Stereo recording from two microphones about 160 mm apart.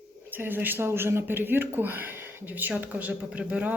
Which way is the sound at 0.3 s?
10° right (ahead or behind).